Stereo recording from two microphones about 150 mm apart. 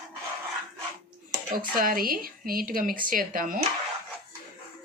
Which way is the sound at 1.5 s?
75° right (ahead or behind).